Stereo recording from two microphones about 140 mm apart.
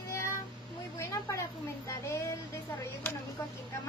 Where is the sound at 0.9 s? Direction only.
20° left (ahead or behind).